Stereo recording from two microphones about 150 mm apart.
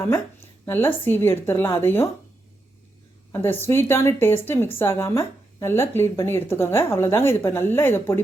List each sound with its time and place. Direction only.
0.0 s a woman's voice: 15° left (ahead or behind)
3.3 s a woman's voice: 15° left (ahead or behind)